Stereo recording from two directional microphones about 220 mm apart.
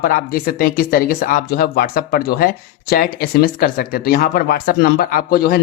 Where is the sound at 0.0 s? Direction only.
40° left (ahead or behind).